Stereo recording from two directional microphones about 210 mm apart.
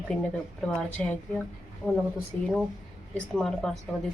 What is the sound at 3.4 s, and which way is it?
Speech, centre (ahead or behind).